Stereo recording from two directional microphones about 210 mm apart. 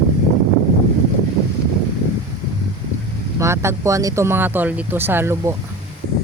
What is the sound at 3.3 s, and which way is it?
Speech, 15° right (ahead or behind).